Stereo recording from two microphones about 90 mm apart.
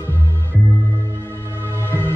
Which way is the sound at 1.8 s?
25° left (ahead or behind).